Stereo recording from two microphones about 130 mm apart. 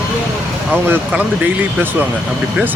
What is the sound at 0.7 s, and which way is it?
Speech, 15° right (ahead or behind).